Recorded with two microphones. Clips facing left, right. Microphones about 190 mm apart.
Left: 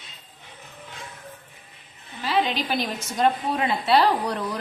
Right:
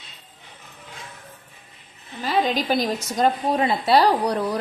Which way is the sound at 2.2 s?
45° right (ahead or behind).